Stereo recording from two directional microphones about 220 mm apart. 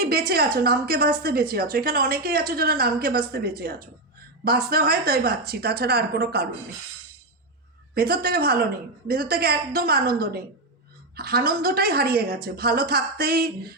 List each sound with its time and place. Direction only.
0.0 s a woman's voice: 45° right (ahead or behind)
7.9 s a woman's voice: 45° right (ahead or behind)